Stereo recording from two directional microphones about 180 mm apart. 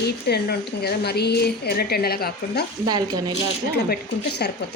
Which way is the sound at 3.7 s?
65° left (ahead or behind).